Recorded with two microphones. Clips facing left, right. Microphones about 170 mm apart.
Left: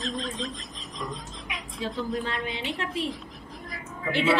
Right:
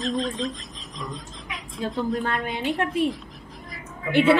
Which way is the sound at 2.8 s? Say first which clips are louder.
Right 7 dB; 55° right (ahead or behind).